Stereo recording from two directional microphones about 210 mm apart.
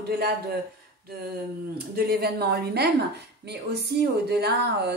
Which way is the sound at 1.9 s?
50° right (ahead or behind).